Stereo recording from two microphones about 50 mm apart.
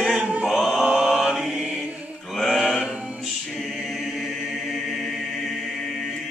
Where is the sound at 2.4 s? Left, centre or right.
Centre.